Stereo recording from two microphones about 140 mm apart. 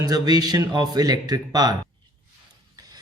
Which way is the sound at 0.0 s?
30° right (ahead or behind).